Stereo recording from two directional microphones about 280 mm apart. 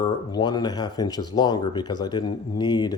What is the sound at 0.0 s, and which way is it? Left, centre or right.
A man's voice, centre.